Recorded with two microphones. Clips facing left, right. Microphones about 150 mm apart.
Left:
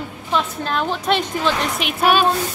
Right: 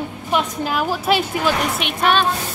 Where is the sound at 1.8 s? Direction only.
10° left (ahead or behind).